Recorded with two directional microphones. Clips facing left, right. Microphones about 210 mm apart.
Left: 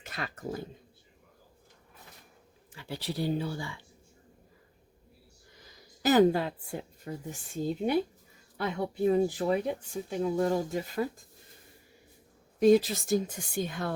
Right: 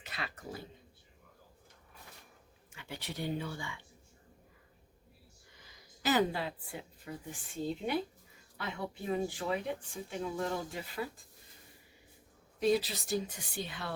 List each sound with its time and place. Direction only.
0.0 s speech: 45° left (ahead or behind)
2.7 s speech: 35° left (ahead or behind)
6.0 s a woman's voice: 45° left (ahead or behind)
12.5 s a woman's voice: 45° left (ahead or behind)